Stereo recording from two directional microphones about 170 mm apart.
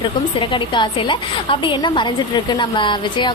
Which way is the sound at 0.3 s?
30° left (ahead or behind).